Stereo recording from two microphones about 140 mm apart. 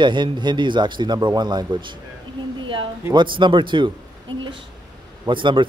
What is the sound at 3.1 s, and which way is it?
Speech, 35° right (ahead or behind).